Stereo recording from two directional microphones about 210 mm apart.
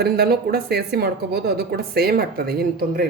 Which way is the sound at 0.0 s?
50° right (ahead or behind).